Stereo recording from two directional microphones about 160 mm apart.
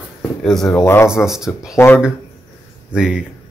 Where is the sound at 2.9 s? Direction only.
5° right (ahead or behind).